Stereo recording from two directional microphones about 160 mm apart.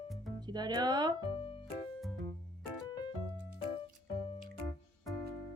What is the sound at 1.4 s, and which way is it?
Music, 35° left (ahead or behind).